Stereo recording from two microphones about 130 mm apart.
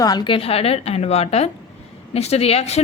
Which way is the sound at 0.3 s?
50° left (ahead or behind).